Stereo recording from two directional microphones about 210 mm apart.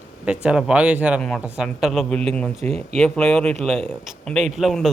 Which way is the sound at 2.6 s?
30° right (ahead or behind).